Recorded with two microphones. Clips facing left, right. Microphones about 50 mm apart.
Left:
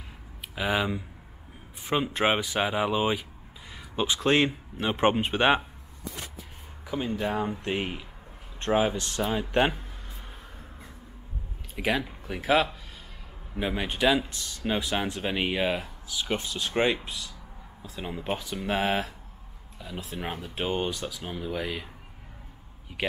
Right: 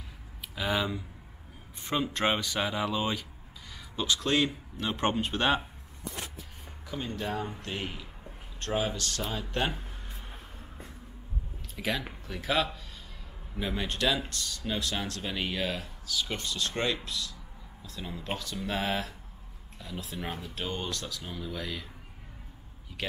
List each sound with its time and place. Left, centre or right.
0.6 s speech: centre
6.9 s speech: centre
11.7 s speech: centre
20.9 s speech: centre
21.2 s speech: left
23.0 s speech: centre